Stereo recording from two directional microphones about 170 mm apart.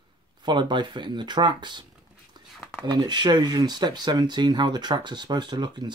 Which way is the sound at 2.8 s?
25° right (ahead or behind).